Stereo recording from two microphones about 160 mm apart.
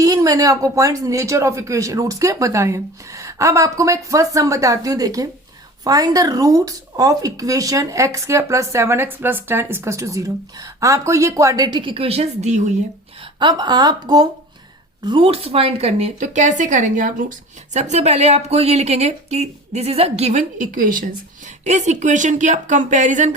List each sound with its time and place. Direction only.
0.0 s speech: 20° right (ahead or behind); by 12.7 s 45° right (ahead or behind)
13.4 s speech: 25° right (ahead or behind); by 23.3 s 50° right (ahead or behind)